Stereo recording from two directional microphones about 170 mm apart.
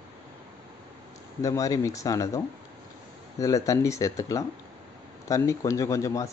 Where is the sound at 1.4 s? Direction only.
20° left (ahead or behind).